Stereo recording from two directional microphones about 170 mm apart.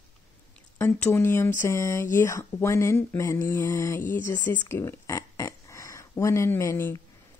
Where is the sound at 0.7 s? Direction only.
10° left (ahead or behind).